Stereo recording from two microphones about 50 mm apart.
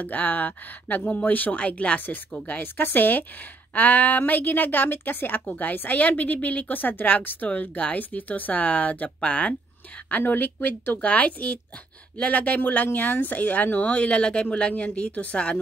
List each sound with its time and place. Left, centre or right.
0.0 s a woman's voice: left
2.6 s a woman's voice: left
5.4 s a woman's voice: left
10.0 s a woman's voice: left